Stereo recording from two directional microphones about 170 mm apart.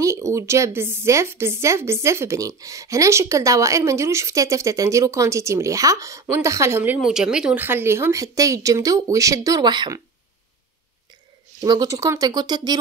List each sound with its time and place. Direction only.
0.0 s a woman's voice: 20° right (ahead or behind)
11.6 s speech: 25° right (ahead or behind)